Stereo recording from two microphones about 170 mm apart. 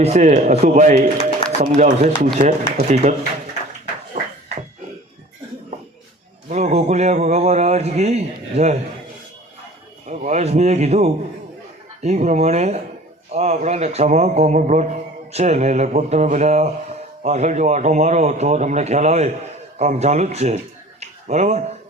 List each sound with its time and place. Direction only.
0.0 s a man's voice: 45° right (ahead or behind)
4.1 s music: 45° right (ahead or behind)
6.5 s a man's voice: 40° right (ahead or behind)
10.1 s a man's voice: 45° right (ahead or behind)
21.0 s a sound: 40° right (ahead or behind)